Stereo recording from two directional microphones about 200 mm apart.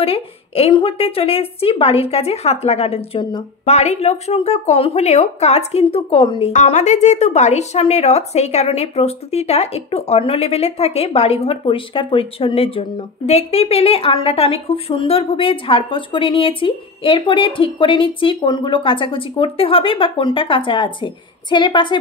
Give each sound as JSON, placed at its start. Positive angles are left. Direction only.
{"t": 0.0, "sound": "a woman's voice", "side_deg": 30}
{"t": 6.5, "sound": "a woman's voice", "side_deg": 35}